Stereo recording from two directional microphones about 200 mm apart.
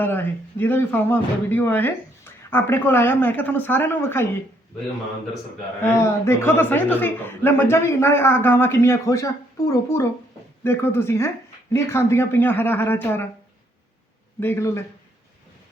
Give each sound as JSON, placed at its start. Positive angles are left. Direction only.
{"t": 0.0, "sound": "speech", "side_deg": 10}
{"t": 5.8, "sound": "speech", "side_deg": 15}
{"t": 14.3, "sound": "speech", "side_deg": 10}